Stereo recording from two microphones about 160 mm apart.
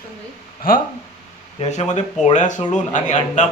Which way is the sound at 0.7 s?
65° left (ahead or behind).